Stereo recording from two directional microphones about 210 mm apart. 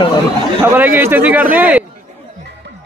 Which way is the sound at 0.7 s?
10° right (ahead or behind).